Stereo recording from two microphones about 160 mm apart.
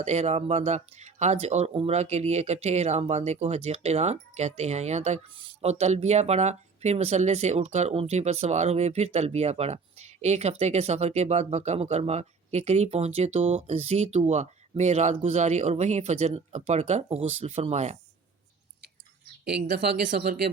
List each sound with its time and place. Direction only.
0.0 s speech: 45° right (ahead or behind)
19.6 s speech: 80° right
20.1 s speech: 60° right (ahead or behind)